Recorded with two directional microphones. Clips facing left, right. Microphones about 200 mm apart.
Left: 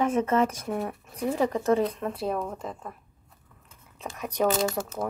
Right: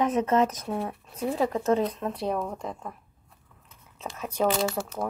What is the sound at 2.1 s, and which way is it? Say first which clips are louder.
Speech: even; 5° left (ahead or behind).